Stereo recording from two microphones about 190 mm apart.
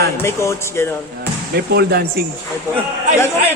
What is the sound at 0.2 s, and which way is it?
Speech, 15° left (ahead or behind).